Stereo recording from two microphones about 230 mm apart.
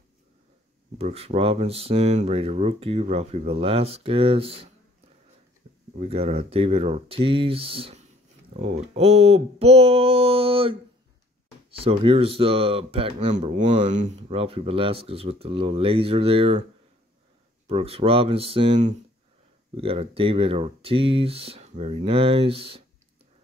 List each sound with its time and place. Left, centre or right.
0.9 s speech: right
5.6 s a sound: right
5.9 s speech: right
11.8 s speech: right
17.6 s speech: right